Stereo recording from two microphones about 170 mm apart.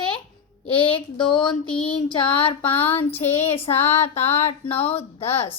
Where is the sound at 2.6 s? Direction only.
10° left (ahead or behind).